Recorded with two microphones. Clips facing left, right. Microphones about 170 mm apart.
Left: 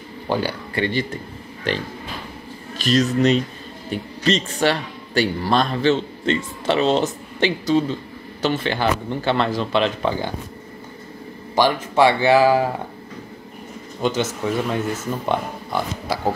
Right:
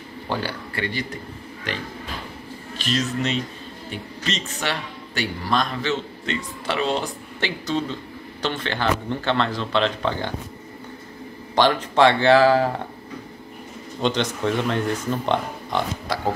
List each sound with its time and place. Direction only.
0.3 s speech: 15° left (ahead or behind)
2.8 s a man's voice: 40° left (ahead or behind); by 10.3 s 10° left (ahead or behind)
11.5 s a man's voice: 10° left (ahead or behind)
14.0 s speech: 5° left (ahead or behind)